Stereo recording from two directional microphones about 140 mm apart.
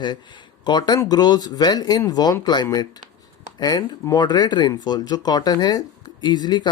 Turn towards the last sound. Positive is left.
turn(degrees=30)  # may be behind; listen again after turning